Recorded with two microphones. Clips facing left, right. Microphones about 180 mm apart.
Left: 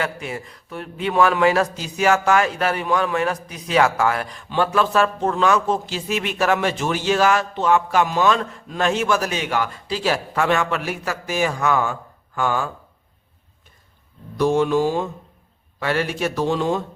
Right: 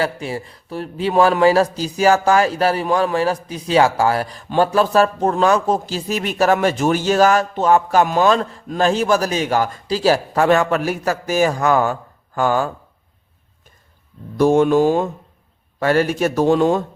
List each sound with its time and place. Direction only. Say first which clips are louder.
0.0 s a man's voice: right 4 dB; 30° right (ahead or behind)
14.3 s speech: right 5 dB; 45° right (ahead or behind)